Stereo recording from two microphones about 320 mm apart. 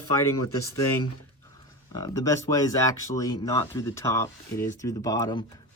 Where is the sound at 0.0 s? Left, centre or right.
Left.